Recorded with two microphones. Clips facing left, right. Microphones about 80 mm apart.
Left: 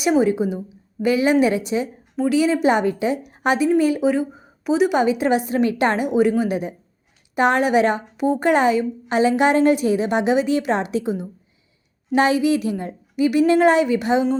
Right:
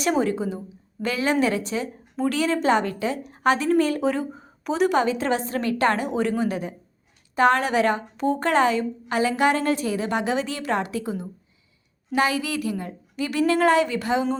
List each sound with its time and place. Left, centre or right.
0.0 s a woman's voice: centre